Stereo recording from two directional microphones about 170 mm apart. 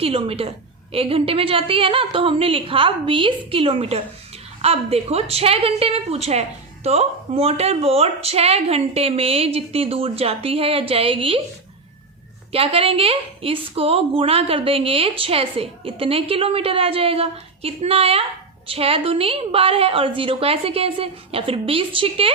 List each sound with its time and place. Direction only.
0.0 s a woman's voice: 35° right (ahead or behind)
12.5 s a woman's voice: 35° right (ahead or behind)